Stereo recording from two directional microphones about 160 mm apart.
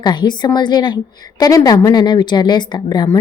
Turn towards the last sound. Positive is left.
turn(degrees=25)  # may be behind; listen again after turning